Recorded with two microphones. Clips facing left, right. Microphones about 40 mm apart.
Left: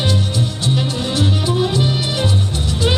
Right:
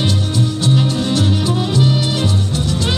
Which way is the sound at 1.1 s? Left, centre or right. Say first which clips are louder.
Even; centre.